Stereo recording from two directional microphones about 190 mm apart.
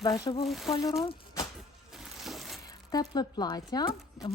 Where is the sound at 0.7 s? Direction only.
20° left (ahead or behind).